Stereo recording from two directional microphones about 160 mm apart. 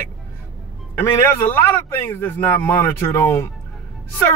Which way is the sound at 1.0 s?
15° left (ahead or behind).